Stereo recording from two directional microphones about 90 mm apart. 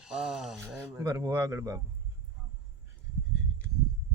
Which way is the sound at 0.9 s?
30° right (ahead or behind).